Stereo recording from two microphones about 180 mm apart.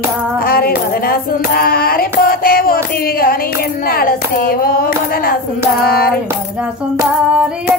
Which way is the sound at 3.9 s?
55° left (ahead or behind).